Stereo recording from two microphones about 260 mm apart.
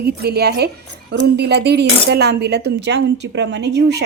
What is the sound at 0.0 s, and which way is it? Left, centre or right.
Cutlery, right.